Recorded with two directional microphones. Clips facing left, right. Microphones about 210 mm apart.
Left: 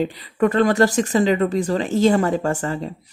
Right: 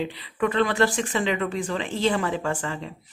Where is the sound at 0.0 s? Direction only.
45° left (ahead or behind).